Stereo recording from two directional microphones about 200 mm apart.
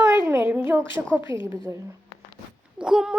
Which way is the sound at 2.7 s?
5° right (ahead or behind).